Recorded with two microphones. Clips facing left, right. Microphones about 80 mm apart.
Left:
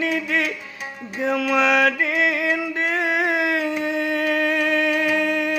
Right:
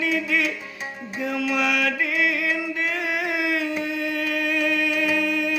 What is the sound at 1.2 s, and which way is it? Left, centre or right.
Music, left.